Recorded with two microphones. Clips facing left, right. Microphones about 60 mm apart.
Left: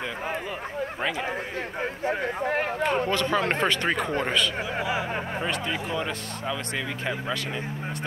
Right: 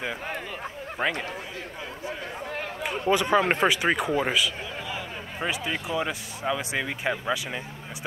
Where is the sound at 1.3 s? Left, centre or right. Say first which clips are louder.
Left 5 dB; left.